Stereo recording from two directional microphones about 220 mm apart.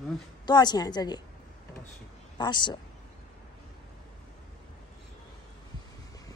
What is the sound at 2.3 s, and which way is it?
Speech, 20° left (ahead or behind).